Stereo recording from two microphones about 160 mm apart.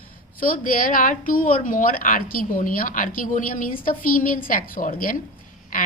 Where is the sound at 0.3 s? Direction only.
60° left (ahead or behind).